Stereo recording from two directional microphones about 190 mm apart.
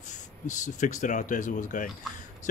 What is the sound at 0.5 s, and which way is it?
Speech, 40° left (ahead or behind).